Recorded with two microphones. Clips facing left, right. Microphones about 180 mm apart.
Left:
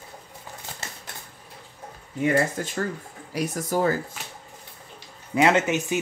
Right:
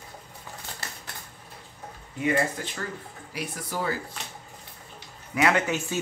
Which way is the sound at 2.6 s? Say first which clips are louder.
Left 6 dB; 45° left (ahead or behind).